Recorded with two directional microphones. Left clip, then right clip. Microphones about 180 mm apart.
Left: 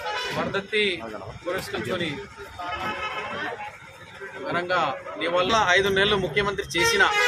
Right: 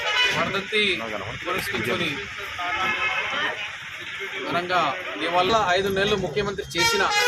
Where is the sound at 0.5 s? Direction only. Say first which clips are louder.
Right 1 dB; 30° left (ahead or behind).